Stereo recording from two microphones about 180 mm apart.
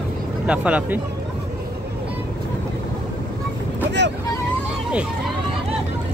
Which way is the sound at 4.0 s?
70° right (ahead or behind).